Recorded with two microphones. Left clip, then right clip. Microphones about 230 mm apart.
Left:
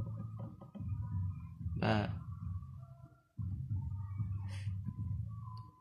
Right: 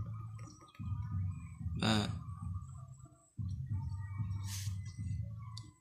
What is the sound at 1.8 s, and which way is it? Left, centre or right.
Speech, left.